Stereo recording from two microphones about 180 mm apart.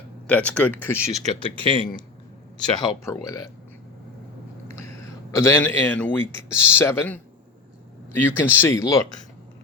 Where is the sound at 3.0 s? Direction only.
15° left (ahead or behind).